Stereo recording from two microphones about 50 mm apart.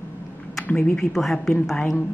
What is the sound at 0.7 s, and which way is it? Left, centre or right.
Speech, left.